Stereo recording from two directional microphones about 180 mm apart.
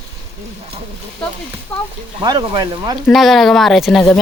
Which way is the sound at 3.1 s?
Centre (ahead or behind).